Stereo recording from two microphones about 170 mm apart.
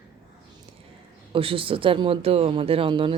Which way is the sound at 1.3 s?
30° right (ahead or behind).